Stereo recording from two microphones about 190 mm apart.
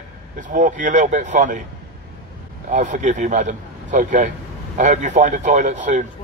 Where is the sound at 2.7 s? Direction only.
40° right (ahead or behind).